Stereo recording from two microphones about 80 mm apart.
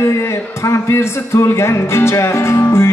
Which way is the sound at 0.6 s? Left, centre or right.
Left.